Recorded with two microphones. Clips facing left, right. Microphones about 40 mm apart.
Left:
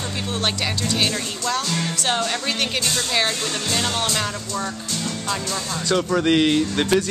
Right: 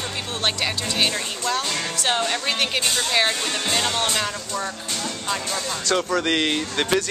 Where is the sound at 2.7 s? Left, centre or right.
Right.